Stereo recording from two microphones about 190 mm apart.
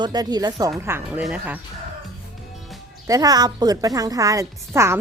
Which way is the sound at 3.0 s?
20° right (ahead or behind).